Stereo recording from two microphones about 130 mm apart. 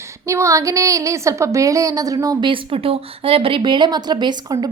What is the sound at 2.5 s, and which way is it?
A woman's voice, 45° right (ahead or behind).